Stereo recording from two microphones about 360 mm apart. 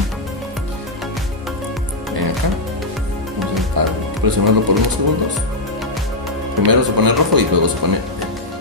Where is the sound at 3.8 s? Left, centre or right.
Right.